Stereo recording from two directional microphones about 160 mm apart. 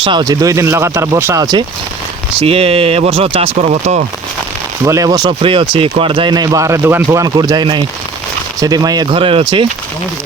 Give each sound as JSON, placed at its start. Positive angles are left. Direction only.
{"t": 0.0, "sound": "speech", "side_deg": -30}
{"t": 2.4, "sound": "speech", "side_deg": -40}
{"t": 4.9, "sound": "speech", "side_deg": -20}